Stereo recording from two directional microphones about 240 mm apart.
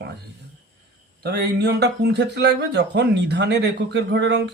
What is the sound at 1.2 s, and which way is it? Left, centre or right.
Speech, right.